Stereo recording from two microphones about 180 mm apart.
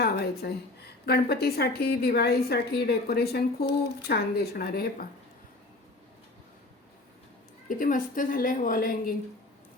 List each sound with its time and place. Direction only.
0.0 s a woman's voice: 65° left (ahead or behind)
7.7 s a woman's voice: 50° left (ahead or behind)